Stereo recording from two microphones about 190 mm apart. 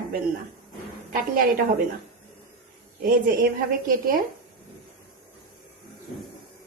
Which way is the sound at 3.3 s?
45° right (ahead or behind).